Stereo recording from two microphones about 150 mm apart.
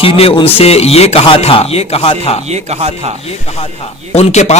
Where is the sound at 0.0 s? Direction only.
40° left (ahead or behind).